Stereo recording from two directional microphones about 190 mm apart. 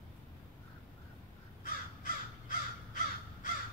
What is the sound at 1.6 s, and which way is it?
Crow, 45° left (ahead or behind).